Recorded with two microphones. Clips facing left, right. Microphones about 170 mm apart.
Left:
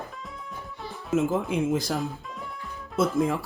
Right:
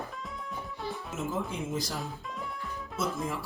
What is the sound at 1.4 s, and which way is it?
Speech, 65° left (ahead or behind).